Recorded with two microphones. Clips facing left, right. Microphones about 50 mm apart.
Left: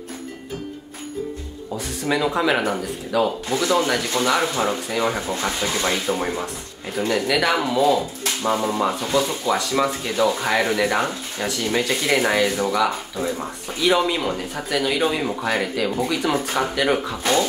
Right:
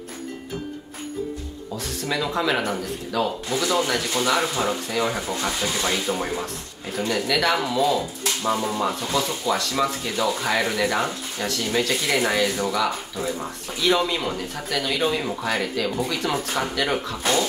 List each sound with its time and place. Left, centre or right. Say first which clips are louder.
1.7 s speech: left 4 dB; centre
3.4 s speech: left 2 dB; left
3.7 s speech: left 3 dB; centre